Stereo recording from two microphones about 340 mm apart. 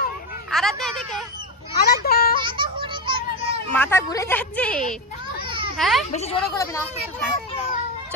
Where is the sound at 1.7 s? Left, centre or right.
Left.